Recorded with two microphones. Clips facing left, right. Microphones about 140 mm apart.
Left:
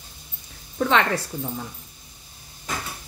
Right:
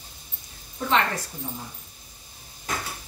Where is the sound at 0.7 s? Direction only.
70° left (ahead or behind).